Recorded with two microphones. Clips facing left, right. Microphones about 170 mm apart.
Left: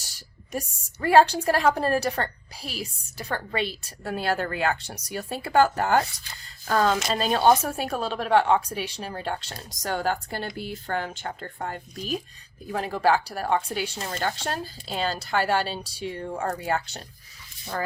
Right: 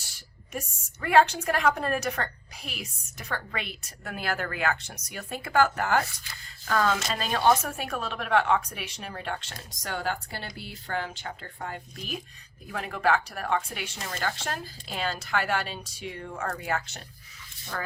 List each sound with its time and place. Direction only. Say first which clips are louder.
0.0 s a woman's voice: left 3 dB; 40° left (ahead or behind)